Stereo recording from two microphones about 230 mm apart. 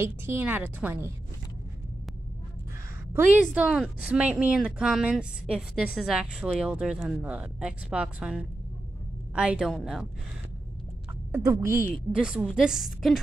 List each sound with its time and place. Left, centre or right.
0.0 s a woman's voice: centre
3.5 s a woman's voice: centre
11.3 s a woman's voice: centre